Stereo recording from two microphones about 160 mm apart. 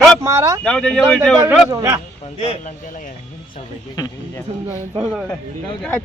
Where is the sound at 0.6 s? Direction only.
5° left (ahead or behind).